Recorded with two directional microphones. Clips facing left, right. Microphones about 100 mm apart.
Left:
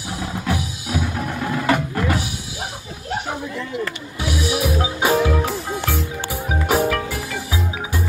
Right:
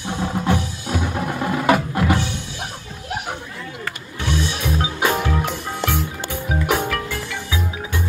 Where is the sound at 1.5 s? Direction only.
5° right (ahead or behind).